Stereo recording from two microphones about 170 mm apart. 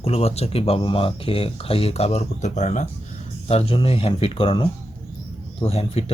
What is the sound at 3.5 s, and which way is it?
Speech, 30° left (ahead or behind).